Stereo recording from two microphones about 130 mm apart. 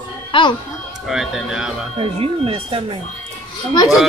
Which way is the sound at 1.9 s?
45° right (ahead or behind).